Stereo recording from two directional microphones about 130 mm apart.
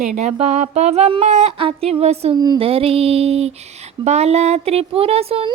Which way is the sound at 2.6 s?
45° right (ahead or behind).